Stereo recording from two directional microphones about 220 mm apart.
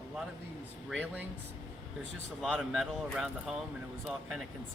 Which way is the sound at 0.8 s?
5° right (ahead or behind).